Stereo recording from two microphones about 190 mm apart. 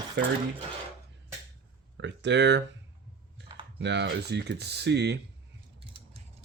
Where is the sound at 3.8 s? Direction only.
65° right (ahead or behind).